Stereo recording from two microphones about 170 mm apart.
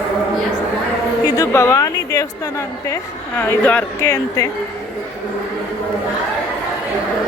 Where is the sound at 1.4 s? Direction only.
20° left (ahead or behind).